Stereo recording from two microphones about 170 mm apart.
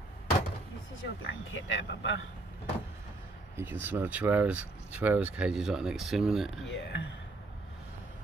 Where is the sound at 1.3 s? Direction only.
90° left.